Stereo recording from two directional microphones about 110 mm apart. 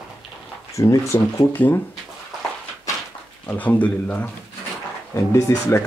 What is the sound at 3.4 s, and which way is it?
Speech, 15° left (ahead or behind).